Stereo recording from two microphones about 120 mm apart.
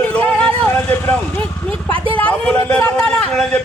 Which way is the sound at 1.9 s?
45° right (ahead or behind).